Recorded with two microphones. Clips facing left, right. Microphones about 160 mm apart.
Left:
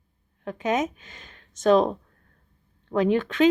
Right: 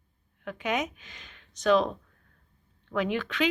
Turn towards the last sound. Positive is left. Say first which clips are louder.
# left 8 dB
turn(degrees=45)  # may be behind; listen again after turning